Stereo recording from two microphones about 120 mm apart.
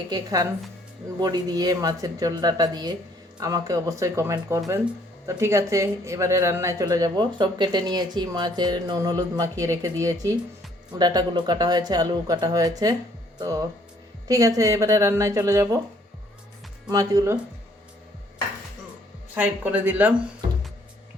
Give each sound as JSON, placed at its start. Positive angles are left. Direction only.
{"t": 0.1, "sound": "speech", "side_deg": -30}
{"t": 16.9, "sound": "speech", "side_deg": -30}
{"t": 19.3, "sound": "speech", "side_deg": -15}